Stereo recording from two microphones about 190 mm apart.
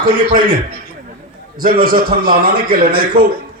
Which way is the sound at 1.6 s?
50° right (ahead or behind).